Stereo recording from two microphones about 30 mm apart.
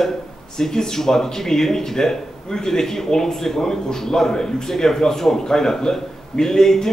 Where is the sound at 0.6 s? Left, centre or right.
Centre.